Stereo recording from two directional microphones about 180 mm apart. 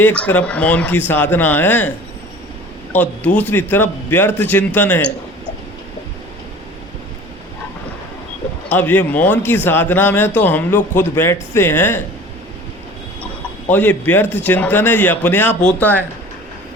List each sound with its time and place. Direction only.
0.0 s speech: 10° left (ahead or behind)
3.3 s speech: 10° left (ahead or behind)
8.7 s speech: 10° left (ahead or behind)
13.7 s speech: 10° left (ahead or behind)